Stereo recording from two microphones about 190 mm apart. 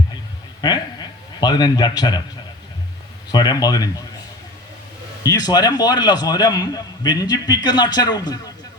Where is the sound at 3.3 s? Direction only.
20° left (ahead or behind).